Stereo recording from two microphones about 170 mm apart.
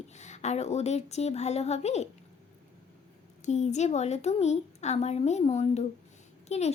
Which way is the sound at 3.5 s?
40° left (ahead or behind).